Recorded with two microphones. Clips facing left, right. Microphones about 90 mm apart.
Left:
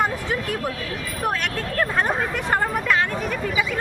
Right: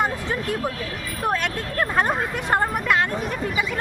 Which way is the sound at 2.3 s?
25° right (ahead or behind).